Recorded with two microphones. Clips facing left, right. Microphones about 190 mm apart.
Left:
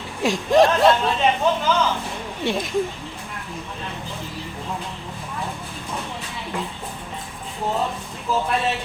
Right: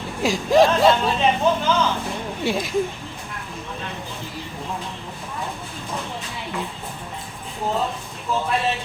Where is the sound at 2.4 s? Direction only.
5° right (ahead or behind).